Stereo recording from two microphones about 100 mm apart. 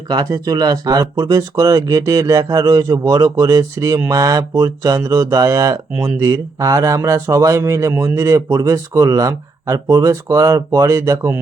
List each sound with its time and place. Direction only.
0.1 s speech: 40° right (ahead or behind)